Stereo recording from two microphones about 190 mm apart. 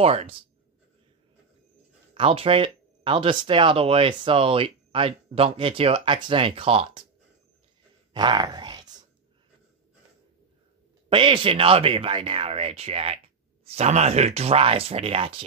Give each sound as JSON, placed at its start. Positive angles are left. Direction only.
{"t": 0.0, "sound": "speech", "side_deg": -30}
{"t": 2.1, "sound": "speech", "side_deg": -30}
{"t": 8.1, "sound": "speech", "side_deg": -25}
{"t": 11.1, "sound": "speech", "side_deg": -25}